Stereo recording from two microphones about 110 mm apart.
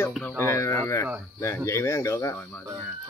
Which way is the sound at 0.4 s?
25° left (ahead or behind).